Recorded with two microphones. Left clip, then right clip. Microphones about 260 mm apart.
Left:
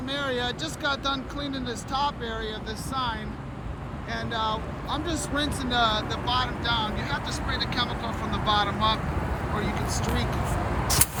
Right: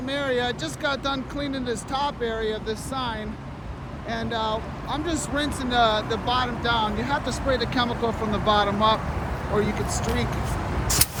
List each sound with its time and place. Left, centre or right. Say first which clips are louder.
0.0 s speech: right 3 dB; centre